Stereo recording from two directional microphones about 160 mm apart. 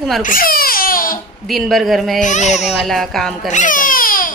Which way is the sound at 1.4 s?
Centre (ahead or behind).